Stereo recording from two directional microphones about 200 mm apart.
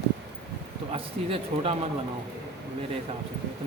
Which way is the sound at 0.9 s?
30° right (ahead or behind).